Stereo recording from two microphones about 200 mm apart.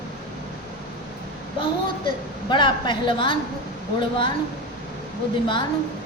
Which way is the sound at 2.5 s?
25° left (ahead or behind).